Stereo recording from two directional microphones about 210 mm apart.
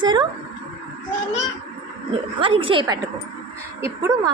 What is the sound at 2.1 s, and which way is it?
A woman's voice, 25° right (ahead or behind).